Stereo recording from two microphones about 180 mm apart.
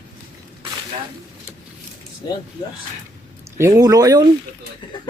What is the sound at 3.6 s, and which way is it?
Speech, 20° right (ahead or behind).